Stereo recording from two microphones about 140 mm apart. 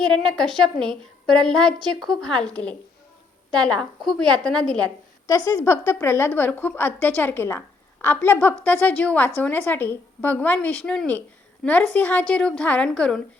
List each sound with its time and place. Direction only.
0.0 s a woman's voice: 5° left (ahead or behind)
5.5 s a woman's voice: 20° left (ahead or behind)